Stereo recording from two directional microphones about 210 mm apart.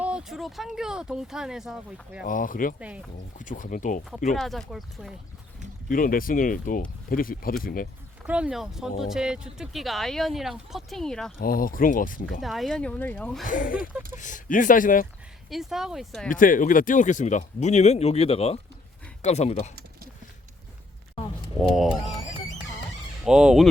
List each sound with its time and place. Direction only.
0.0 s speech: 5° right (ahead or behind)
2.2 s speech: 40° left (ahead or behind)
2.8 s speech: 5° right (ahead or behind)
3.3 s speech: 40° left (ahead or behind)
4.4 s speech: centre (ahead or behind)
5.9 s speech: 40° left (ahead or behind)
8.3 s speech: 5° right (ahead or behind)
11.3 s speech: 45° left (ahead or behind)
12.4 s speech: centre (ahead or behind)
13.4 s speech: 40° left (ahead or behind)
15.4 s speech: centre (ahead or behind)
16.3 s speech: 40° left (ahead or behind)
21.6 s speech: centre (ahead or behind)
23.2 s speech: 5° right (ahead or behind)